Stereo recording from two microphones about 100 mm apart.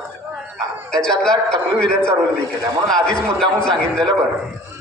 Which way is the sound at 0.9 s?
5° left (ahead or behind).